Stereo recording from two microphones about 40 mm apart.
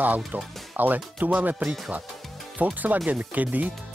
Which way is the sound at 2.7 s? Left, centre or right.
Right.